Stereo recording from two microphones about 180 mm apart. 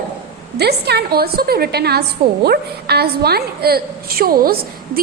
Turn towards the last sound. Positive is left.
turn(degrees=-55)  # may be behind; listen again after turning